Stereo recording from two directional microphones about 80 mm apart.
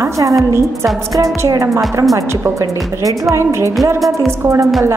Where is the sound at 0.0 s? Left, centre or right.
Right.